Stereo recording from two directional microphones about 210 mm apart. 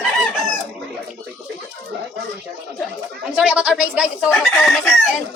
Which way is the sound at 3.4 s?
5° right (ahead or behind).